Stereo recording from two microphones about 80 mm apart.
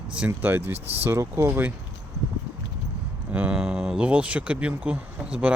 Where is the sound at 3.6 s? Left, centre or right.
Centre.